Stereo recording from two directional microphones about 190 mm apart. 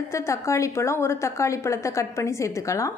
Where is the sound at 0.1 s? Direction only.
15° left (ahead or behind).